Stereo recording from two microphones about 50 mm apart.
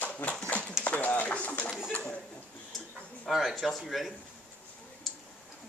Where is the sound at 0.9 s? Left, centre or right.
Left.